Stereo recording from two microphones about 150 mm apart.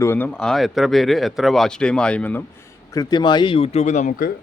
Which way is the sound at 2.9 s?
25° left (ahead or behind).